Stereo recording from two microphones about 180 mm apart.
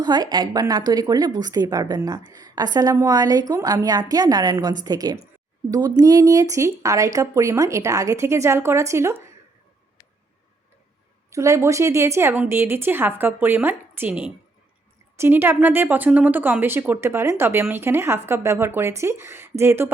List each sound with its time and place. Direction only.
0.0 s a woman's voice: 25° right (ahead or behind)
11.3 s a woman's voice: 15° right (ahead or behind)